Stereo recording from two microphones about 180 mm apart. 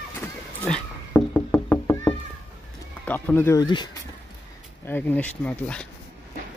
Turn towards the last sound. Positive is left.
turn(degrees=5)  # may be behind; listen again after turning